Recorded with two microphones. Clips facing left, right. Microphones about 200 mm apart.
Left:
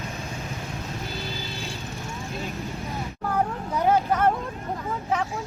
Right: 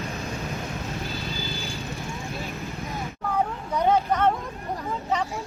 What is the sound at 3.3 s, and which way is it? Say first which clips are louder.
Vehicle: even; 5° left (ahead or behind).